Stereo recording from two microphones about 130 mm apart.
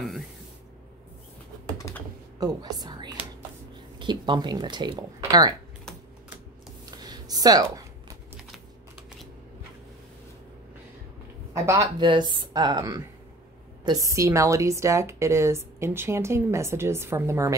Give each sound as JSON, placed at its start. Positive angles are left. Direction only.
{"t": 1.8, "sound": "computer keyboard", "side_deg": 25}
{"t": 2.4, "sound": "whispering", "side_deg": -30}
{"t": 4.0, "sound": "speech", "side_deg": -35}
{"t": 6.9, "sound": "a sound", "side_deg": -30}
{"t": 11.5, "sound": "a woman's voice", "side_deg": -25}
{"t": 12.0, "sound": "a woman's voice", "side_deg": -35}